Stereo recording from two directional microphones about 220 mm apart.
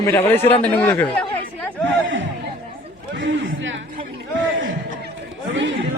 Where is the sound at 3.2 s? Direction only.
60° right (ahead or behind).